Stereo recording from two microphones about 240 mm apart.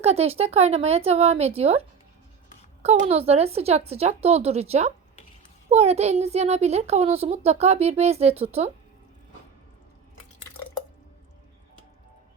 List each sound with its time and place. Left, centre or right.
0.0 s a child's voice: right
2.8 s a child's voice: right